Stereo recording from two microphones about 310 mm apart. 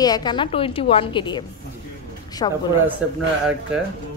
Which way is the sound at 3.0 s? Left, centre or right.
Centre.